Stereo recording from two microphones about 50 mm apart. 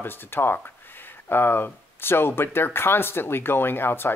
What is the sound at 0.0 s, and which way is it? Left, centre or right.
Speech, left.